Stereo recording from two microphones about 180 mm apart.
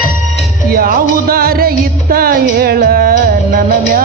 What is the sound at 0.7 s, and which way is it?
Music, 55° right (ahead or behind).